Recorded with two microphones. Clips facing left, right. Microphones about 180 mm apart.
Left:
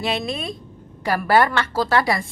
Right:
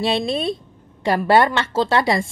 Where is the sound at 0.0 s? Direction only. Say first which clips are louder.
Right 5 dB; 30° right (ahead or behind).